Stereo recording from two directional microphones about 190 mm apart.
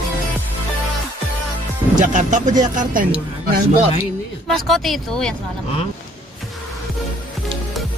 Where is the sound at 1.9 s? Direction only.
40° right (ahead or behind).